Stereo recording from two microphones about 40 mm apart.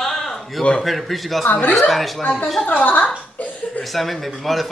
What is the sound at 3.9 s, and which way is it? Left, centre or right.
Speech, centre.